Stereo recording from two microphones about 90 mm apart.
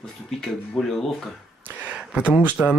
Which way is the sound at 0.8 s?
5° right (ahead or behind).